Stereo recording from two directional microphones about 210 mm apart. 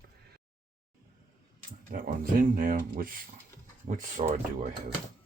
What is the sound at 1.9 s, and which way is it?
Speech, 40° right (ahead or behind).